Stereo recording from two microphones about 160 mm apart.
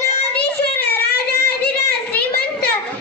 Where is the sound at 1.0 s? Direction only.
75° left (ahead or behind).